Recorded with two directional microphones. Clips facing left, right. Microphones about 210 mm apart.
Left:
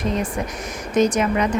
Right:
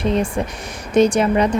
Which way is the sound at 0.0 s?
30° right (ahead or behind).